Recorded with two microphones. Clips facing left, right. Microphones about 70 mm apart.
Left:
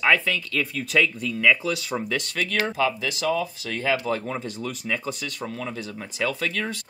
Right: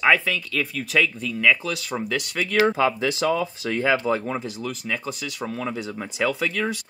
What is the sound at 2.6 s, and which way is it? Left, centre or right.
Speech, right.